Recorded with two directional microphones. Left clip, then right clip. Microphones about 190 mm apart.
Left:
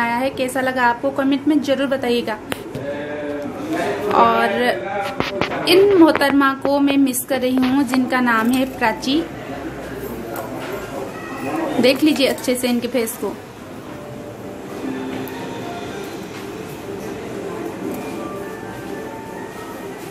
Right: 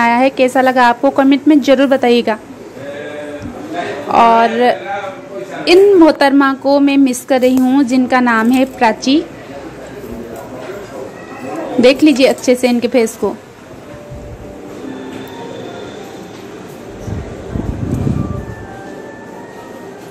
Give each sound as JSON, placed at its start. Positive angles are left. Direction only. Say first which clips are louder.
{"t": 0.0, "sound": "a woman's voice", "louder": "right 9 dB", "side_deg": -40}
{"t": 4.1, "sound": "a man's voice", "louder": "right 6 dB", "side_deg": -30}
{"t": 11.8, "sound": "a woman's voice", "louder": "right 7 dB", "side_deg": -35}